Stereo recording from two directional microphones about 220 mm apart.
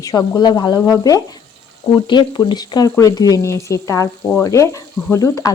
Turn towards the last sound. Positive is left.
turn(degrees=15)  # may be behind; listen again after turning